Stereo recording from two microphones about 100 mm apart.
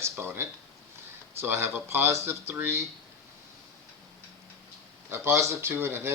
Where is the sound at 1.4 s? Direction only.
25° right (ahead or behind).